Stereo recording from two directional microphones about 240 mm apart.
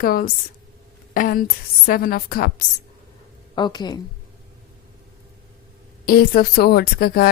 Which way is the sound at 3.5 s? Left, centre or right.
Centre.